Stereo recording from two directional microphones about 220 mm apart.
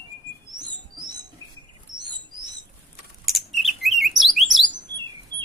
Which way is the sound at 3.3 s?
Centre (ahead or behind).